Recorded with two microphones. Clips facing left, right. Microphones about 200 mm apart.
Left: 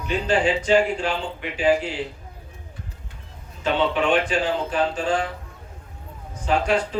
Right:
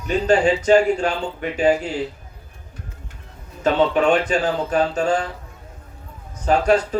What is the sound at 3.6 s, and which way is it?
A man's voice, 40° right (ahead or behind).